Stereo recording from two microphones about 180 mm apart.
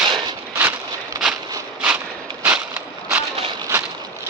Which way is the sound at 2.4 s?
10° right (ahead or behind).